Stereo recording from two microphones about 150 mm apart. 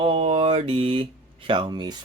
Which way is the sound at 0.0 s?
40° right (ahead or behind).